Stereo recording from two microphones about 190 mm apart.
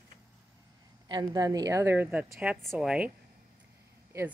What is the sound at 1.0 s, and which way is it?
A woman's voice, 20° right (ahead or behind).